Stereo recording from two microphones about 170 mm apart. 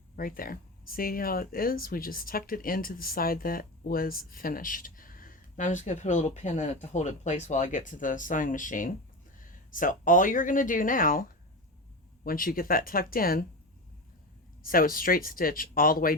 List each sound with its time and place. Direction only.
0.2 s speech: 55° left (ahead or behind)
14.6 s speech: 55° left (ahead or behind)